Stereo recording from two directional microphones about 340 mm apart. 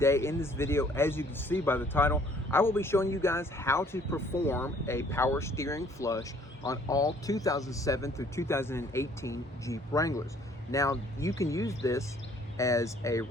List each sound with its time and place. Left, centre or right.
0.0 s speech: centre